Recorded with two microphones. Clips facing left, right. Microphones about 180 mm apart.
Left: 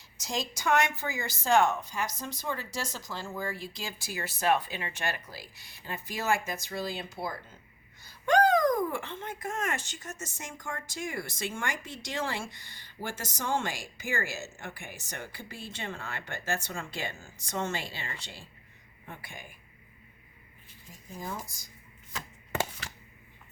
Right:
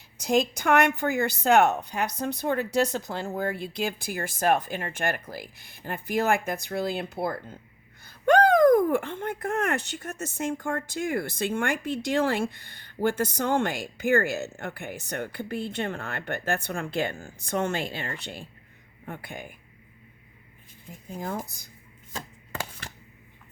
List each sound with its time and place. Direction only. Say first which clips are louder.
0.2 s speech: right 11 dB; 60° right (ahead or behind)
21.1 s speech: right 6 dB; 55° right (ahead or behind)